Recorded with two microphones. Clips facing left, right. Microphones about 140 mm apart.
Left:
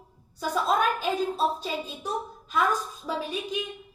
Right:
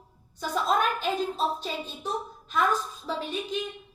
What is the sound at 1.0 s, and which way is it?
A woman's voice, 10° left (ahead or behind).